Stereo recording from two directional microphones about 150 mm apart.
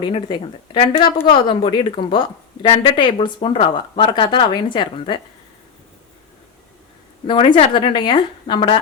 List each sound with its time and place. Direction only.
0.0 s a woman's voice: 30° left (ahead or behind)
7.3 s a woman's voice: 35° left (ahead or behind)